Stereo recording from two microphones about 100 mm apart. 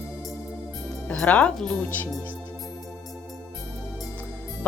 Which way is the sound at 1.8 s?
20° left (ahead or behind).